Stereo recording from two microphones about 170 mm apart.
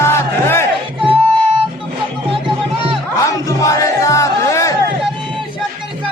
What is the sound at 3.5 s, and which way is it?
Music, 20° left (ahead or behind).